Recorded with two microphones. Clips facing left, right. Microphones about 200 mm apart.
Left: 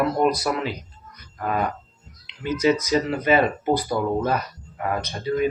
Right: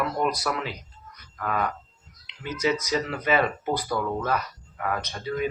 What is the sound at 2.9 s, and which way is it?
Speech, 30° left (ahead or behind).